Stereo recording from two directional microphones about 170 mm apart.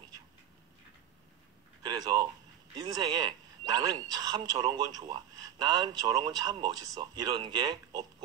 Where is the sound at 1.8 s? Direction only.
25° right (ahead or behind).